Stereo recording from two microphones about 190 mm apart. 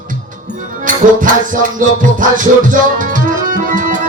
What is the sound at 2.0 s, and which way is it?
Music, 45° right (ahead or behind).